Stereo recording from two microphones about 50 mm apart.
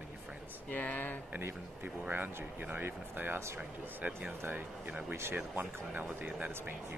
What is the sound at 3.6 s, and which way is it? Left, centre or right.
Speech, right.